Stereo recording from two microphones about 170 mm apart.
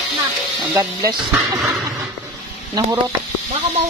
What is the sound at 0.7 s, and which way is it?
Speech, 20° right (ahead or behind).